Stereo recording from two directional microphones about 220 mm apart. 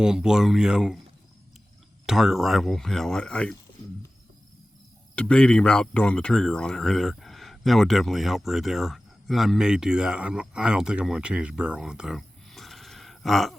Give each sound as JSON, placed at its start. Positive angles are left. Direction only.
{"t": 0.0, "sound": "speech", "side_deg": -5}
{"t": 2.0, "sound": "speech", "side_deg": 0}
{"t": 5.1, "sound": "speech", "side_deg": 5}